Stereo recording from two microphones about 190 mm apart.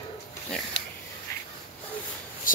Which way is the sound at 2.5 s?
45° left (ahead or behind).